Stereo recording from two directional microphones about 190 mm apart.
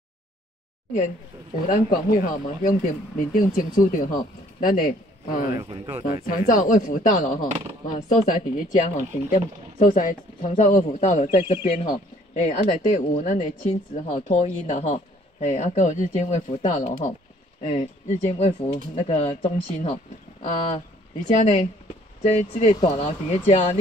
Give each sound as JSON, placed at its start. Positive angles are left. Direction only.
{"t": 1.7, "sound": "speech", "side_deg": 50}
{"t": 5.6, "sound": "speech", "side_deg": -25}
{"t": 6.2, "sound": "speech", "side_deg": 45}